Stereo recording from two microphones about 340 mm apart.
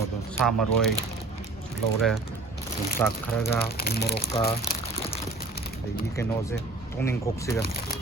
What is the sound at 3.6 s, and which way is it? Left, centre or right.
Speech, left.